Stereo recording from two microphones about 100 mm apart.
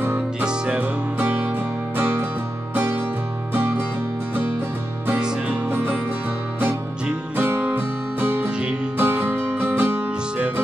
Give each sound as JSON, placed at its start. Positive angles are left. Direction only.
{"t": 0.4, "sound": "music", "side_deg": -10}
{"t": 2.7, "sound": "music", "side_deg": -15}
{"t": 5.0, "sound": "music", "side_deg": -15}